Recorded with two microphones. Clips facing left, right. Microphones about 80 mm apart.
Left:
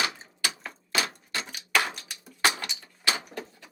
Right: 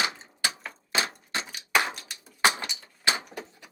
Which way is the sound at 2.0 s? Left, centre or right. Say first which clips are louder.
Even; centre.